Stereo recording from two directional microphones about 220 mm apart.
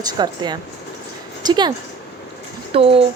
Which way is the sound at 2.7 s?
25° right (ahead or behind).